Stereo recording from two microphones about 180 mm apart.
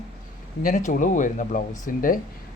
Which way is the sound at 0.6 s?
45° left (ahead or behind).